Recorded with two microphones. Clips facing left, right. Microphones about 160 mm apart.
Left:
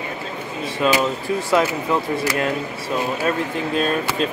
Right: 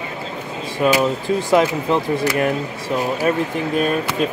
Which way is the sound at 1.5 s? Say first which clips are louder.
Right 3 dB; 20° right (ahead or behind).